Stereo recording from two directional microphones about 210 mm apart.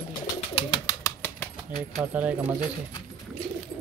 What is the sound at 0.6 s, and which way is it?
Bird, 25° left (ahead or behind).